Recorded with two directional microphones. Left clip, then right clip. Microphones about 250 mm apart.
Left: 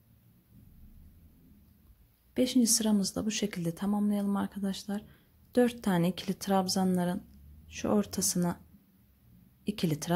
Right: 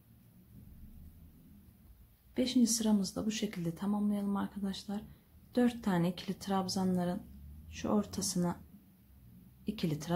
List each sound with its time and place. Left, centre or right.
2.3 s speech: left
9.7 s speech: left